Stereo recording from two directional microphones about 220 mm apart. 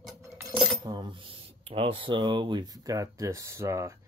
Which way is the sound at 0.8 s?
20° right (ahead or behind).